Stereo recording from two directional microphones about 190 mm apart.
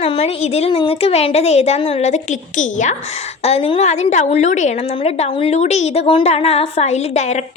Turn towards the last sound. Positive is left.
turn(degrees=35)  # may be behind; listen again after turning